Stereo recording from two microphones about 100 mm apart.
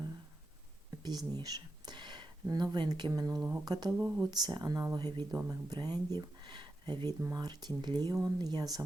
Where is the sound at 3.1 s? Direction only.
35° right (ahead or behind).